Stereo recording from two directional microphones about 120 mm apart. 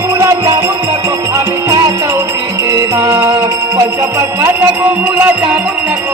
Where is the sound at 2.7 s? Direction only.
25° right (ahead or behind).